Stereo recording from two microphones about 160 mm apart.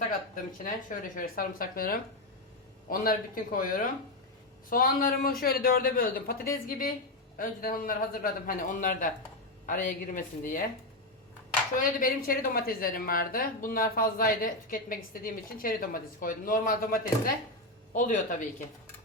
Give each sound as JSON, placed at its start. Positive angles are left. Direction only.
{"t": 0.1, "sound": "a woman's voice", "side_deg": 55}
{"t": 11.8, "sound": "a woman's voice", "side_deg": 60}